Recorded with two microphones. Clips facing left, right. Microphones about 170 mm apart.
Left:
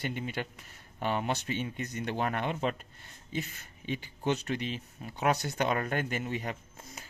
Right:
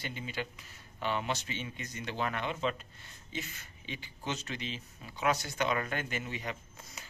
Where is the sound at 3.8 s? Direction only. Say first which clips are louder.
Left 8 dB; 50° left (ahead or behind).